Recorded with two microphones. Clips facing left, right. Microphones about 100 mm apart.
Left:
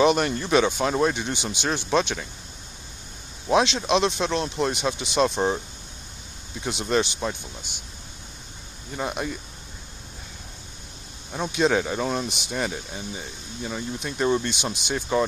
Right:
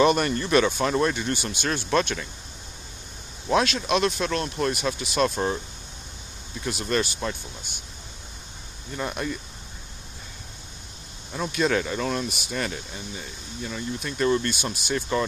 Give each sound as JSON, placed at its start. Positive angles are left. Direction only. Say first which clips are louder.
{"t": 0.2, "sound": "speech", "louder": "even", "side_deg": 5}
{"t": 3.5, "sound": "speech", "louder": "left 2 dB", "side_deg": 25}
{"t": 6.6, "sound": "speech", "louder": "left 2 dB", "side_deg": 20}
{"t": 8.9, "sound": "speech", "louder": "left 1 dB", "side_deg": 10}
{"t": 11.5, "sound": "speech", "louder": "left 2 dB", "side_deg": 15}